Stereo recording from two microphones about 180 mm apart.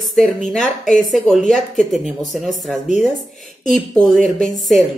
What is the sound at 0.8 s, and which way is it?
Speech, 45° left (ahead or behind).